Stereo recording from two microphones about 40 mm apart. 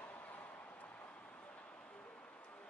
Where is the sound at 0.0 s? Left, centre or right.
Left.